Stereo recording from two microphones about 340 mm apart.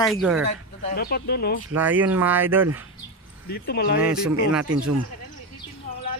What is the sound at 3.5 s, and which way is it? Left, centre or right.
Speech, left.